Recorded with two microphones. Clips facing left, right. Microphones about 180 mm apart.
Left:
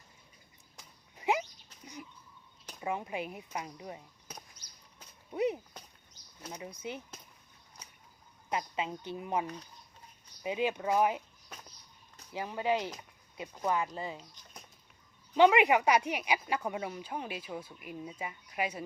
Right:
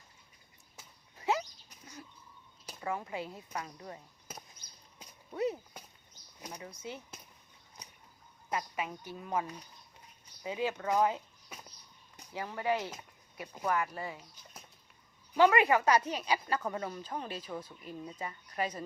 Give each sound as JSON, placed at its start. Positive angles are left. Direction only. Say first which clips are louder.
{"t": 1.1, "sound": "dog", "louder": "left 1 dB", "side_deg": 15}
{"t": 2.8, "sound": "a woman's voice", "louder": "left 2 dB", "side_deg": 20}
{"t": 5.3, "sound": "a woman's voice", "louder": "left 2 dB", "side_deg": 20}
{"t": 8.4, "sound": "a woman's voice", "louder": "left 2 dB", "side_deg": 20}
{"t": 12.3, "sound": "a woman's voice", "louder": "left 2 dB", "side_deg": 15}
{"t": 15.4, "sound": "a woman's voice", "louder": "left 2 dB", "side_deg": 15}